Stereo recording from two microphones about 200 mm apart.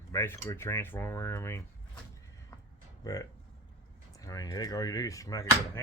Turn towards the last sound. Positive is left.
turn(degrees=15)  # may be behind; listen again after turning